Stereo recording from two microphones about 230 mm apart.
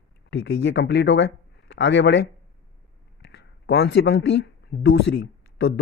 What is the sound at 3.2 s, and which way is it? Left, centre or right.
Speech, left.